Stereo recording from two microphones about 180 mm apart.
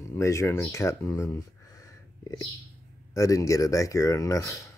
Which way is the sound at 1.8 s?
20° left (ahead or behind).